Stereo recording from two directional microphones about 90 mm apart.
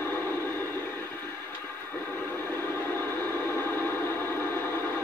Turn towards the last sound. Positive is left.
turn(degrees=25)  # may be behind; listen again after turning